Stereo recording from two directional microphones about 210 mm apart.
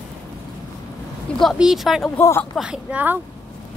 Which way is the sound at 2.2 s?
10° left (ahead or behind).